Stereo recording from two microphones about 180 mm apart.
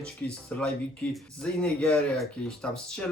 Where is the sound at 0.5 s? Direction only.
10° left (ahead or behind).